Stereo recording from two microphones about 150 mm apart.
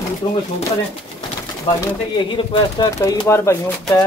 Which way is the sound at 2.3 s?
30° left (ahead or behind).